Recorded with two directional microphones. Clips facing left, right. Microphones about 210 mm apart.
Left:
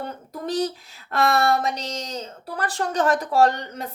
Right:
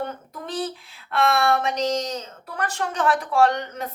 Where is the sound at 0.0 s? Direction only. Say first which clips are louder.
Even; 40° left (ahead or behind).